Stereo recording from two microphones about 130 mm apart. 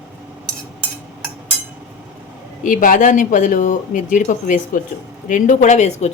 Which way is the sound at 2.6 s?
90° left.